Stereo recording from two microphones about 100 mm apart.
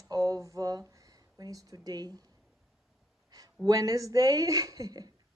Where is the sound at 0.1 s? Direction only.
35° right (ahead or behind).